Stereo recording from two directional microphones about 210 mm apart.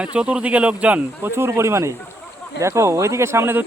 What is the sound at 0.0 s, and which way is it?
Speech, 5° right (ahead or behind).